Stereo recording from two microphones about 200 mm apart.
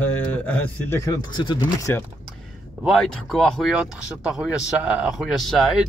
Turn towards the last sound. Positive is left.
turn(degrees=0)  # may be behind; listen again after turning